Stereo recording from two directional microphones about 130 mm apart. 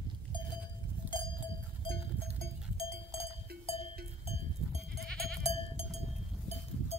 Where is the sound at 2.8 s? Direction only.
45° left (ahead or behind).